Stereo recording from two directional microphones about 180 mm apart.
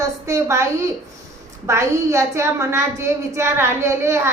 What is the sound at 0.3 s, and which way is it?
A woman's voice, 15° right (ahead or behind).